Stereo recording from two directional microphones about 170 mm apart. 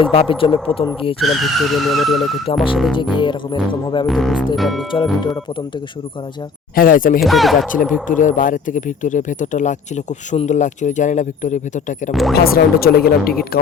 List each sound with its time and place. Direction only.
0.0 s speech: 30° left (ahead or behind)
1.2 s speech: centre (ahead or behind)
2.5 s speech: 35° left (ahead or behind)
2.9 s music: 30° left (ahead or behind)
4.0 s speech: centre (ahead or behind)
6.7 s speech: 55° left (ahead or behind)
7.2 s speech: centre (ahead or behind)
7.7 s speech: 50° left (ahead or behind)
12.3 s speech: 65° left (ahead or behind)